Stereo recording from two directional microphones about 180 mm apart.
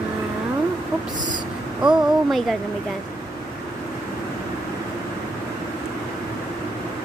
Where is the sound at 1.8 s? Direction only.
Centre (ahead or behind).